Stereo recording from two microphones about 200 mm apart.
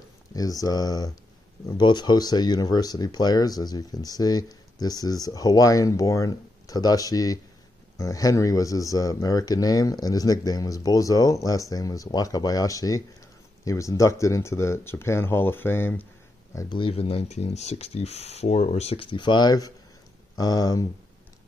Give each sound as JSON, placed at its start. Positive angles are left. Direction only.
{"t": 0.3, "sound": "speech", "side_deg": 15}
{"t": 16.5, "sound": "speech", "side_deg": 25}